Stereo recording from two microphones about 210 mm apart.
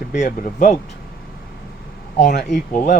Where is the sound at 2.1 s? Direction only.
35° left (ahead or behind).